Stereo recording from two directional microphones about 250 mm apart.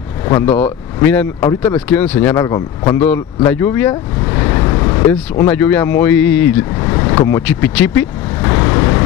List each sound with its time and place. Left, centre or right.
0.2 s speech: centre